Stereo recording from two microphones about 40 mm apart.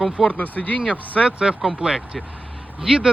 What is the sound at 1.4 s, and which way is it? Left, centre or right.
Speech, centre.